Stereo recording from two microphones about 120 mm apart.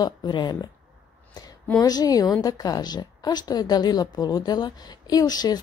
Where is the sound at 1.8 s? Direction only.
30° left (ahead or behind).